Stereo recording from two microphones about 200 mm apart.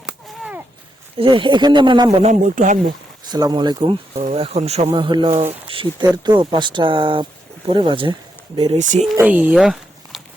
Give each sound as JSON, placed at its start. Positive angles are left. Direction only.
{"t": 0.0, "sound": "whip", "side_deg": -5}
{"t": 1.2, "sound": "speech", "side_deg": -25}
{"t": 2.3, "sound": "speech", "side_deg": -40}
{"t": 3.2, "sound": "speech", "side_deg": -20}
{"t": 4.9, "sound": "speech", "side_deg": -20}
{"t": 9.1, "sound": "speech", "side_deg": -10}